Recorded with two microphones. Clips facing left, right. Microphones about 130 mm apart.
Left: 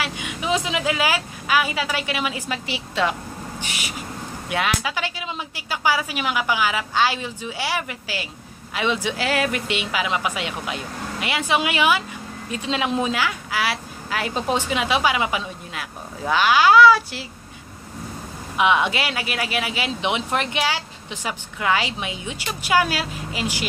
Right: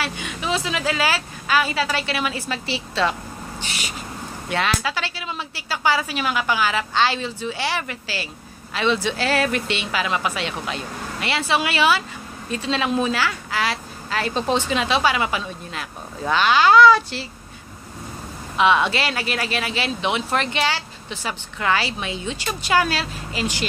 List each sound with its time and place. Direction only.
0.0 s speech: 15° left (ahead or behind)
18.6 s speech: 15° left (ahead or behind)